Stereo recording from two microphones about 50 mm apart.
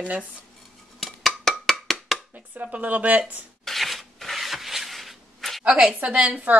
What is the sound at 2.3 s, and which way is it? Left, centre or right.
Speech, right.